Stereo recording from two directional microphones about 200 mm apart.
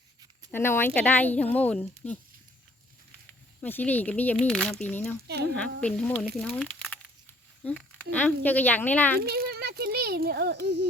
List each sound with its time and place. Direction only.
0.5 s speech: 10° left (ahead or behind)
3.6 s speech: 10° left (ahead or behind)
5.3 s a woman's voice: 55° right (ahead or behind)
5.8 s speech: 5° left (ahead or behind)
7.6 s a sound: 5° left (ahead or behind)
8.1 s speech: 10° left (ahead or behind)
9.2 s speech: 50° right (ahead or behind)